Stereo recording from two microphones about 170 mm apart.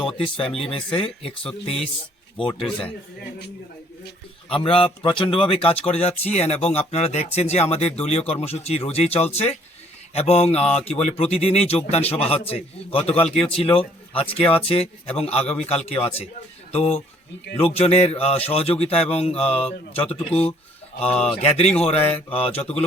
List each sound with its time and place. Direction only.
0.3 s speech: 35° left (ahead or behind)
2.6 s a man's voice: 5° left (ahead or behind)
4.4 s speech: 30° left (ahead or behind)